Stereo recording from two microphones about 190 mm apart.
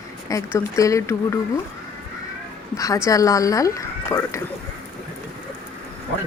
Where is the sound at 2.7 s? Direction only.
15° left (ahead or behind).